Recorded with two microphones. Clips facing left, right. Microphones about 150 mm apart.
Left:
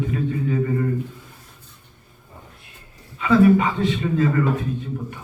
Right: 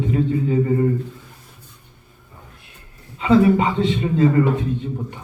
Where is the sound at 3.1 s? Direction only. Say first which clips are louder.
Even; 25° right (ahead or behind).